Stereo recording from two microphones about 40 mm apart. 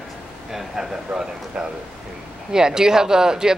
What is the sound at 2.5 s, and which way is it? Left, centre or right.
A woman's voice, centre.